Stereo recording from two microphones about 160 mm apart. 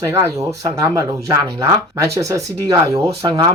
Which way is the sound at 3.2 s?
30° right (ahead or behind).